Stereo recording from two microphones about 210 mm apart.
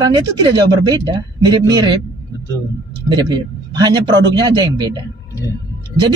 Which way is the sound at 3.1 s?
20° right (ahead or behind).